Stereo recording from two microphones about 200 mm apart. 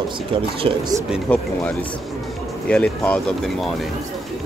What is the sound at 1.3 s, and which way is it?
Speech, 5° left (ahead or behind).